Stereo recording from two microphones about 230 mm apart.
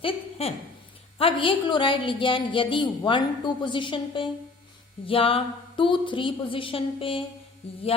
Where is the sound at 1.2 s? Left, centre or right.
Left.